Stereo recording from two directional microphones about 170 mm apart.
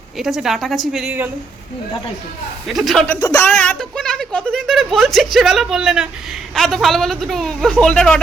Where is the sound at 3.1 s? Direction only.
20° left (ahead or behind).